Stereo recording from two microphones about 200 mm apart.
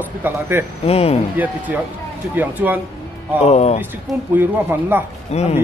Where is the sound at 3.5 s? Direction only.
35° left (ahead or behind).